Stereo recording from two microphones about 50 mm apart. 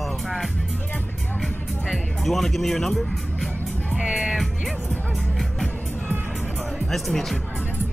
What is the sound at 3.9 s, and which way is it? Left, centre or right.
Speech, centre.